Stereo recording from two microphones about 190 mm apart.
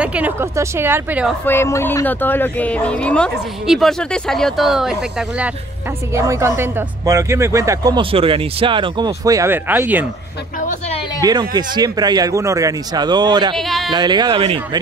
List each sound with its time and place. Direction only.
0.0 s speech: 5° right (ahead or behind)
1.4 s speech: 10° left (ahead or behind)
6.1 s speech: 15° right (ahead or behind)
10.6 s a sound: 40° left (ahead or behind)
11.2 s speech: 20° right (ahead or behind)
13.6 s speech: centre (ahead or behind)
13.9 s speech: 20° right (ahead or behind)